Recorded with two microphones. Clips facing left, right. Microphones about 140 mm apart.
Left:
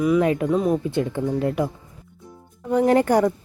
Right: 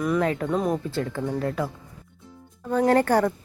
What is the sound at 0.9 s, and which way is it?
Speech, 20° left (ahead or behind).